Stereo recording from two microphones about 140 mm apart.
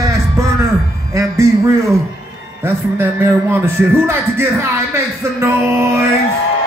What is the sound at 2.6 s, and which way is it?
A man's voice, 15° right (ahead or behind).